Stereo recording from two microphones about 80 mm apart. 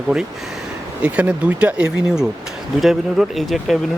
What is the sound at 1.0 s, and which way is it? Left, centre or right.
Speech, centre.